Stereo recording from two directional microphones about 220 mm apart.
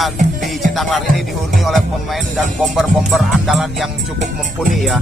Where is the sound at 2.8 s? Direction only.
Centre (ahead or behind).